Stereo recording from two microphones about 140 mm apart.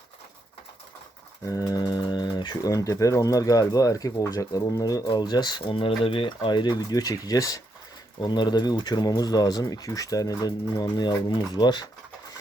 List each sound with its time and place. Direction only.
1.5 s speech: 25° left (ahead or behind)